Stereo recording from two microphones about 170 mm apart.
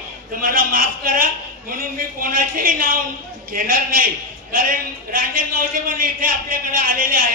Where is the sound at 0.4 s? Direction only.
55° right (ahead or behind).